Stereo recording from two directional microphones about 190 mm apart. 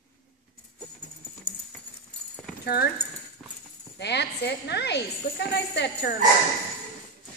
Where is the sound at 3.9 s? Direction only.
60° left (ahead or behind).